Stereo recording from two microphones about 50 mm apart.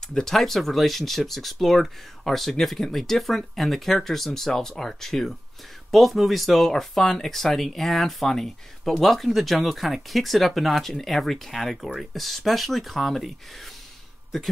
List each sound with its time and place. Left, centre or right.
0.1 s speech: centre